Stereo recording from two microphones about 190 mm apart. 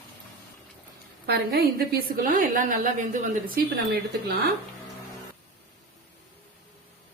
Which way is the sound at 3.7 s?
60° right (ahead or behind).